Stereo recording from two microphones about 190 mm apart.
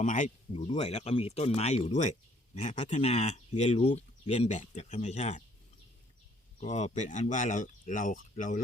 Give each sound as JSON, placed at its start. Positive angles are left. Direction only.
{"t": 0.0, "sound": "speech", "side_deg": 40}
{"t": 6.6, "sound": "speech", "side_deg": 35}